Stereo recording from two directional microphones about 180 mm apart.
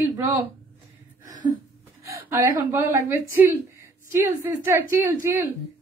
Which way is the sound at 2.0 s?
15° right (ahead or behind).